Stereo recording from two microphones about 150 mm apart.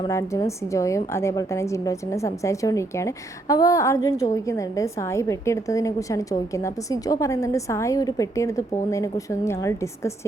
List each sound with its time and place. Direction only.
0.1 s a woman's voice: 20° left (ahead or behind)